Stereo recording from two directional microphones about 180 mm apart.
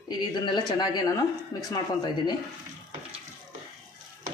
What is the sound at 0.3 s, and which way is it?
Speech, 25° left (ahead or behind).